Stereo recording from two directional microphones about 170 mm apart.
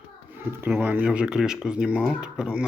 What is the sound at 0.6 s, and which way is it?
Speech, 10° right (ahead or behind).